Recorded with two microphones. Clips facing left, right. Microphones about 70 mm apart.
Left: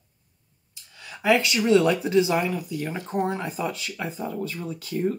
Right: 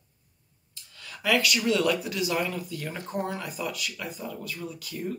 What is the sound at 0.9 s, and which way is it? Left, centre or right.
Speech, left.